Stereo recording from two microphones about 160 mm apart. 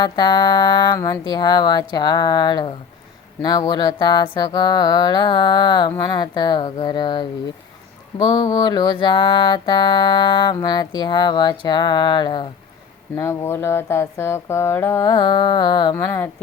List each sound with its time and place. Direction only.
0.0 s music: 30° left (ahead or behind)
13.1 s a sound: 15° left (ahead or behind)
15.1 s music: 30° left (ahead or behind)